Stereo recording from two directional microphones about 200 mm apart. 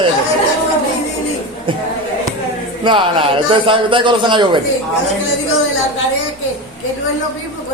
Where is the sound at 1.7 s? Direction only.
25° right (ahead or behind).